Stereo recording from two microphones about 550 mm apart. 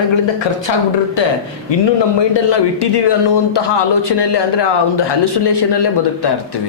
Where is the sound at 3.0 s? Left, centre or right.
Left.